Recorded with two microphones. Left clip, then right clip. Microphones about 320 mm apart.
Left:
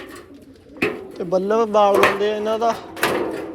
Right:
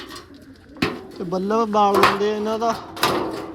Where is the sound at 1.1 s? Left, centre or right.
Centre.